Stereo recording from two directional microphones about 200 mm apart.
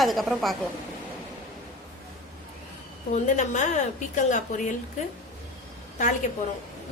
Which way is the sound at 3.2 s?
35° left (ahead or behind).